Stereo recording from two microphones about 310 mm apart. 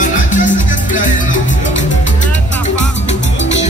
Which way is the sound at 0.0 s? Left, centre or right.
Left.